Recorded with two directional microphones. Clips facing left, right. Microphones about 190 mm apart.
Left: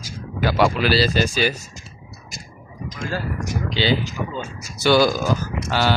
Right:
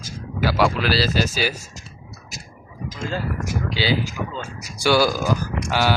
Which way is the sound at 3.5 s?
5° right (ahead or behind).